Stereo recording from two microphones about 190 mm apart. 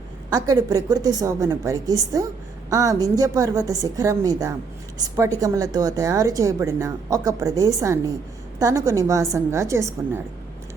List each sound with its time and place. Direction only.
0.3 s a woman's voice: 20° right (ahead or behind)